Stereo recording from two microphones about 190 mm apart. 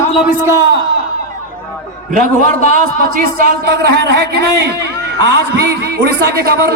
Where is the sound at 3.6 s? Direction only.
60° right (ahead or behind).